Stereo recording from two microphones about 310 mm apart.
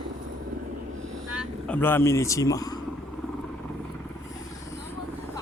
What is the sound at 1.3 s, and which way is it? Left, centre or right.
Speech, centre.